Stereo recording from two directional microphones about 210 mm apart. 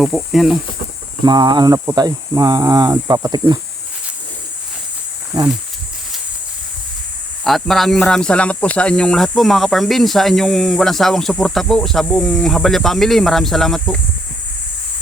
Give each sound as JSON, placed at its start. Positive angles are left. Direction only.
{"t": 0.0, "sound": "speech", "side_deg": 0}
{"t": 1.2, "sound": "speech", "side_deg": -20}
{"t": 5.3, "sound": "speech", "side_deg": -15}
{"t": 7.4, "sound": "speech", "side_deg": 0}